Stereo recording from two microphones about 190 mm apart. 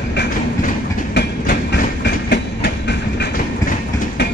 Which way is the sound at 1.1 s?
60° left (ahead or behind).